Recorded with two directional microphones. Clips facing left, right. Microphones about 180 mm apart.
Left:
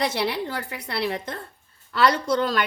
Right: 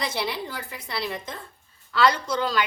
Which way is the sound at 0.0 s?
65° left (ahead or behind).